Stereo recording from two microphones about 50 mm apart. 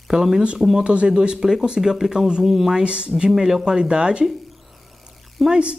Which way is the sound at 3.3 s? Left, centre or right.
Centre.